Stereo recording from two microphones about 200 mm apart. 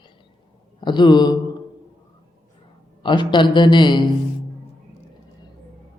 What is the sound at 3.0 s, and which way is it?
A man's voice, 25° left (ahead or behind).